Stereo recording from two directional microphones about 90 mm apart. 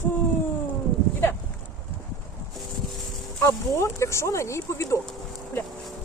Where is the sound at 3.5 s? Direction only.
35° left (ahead or behind).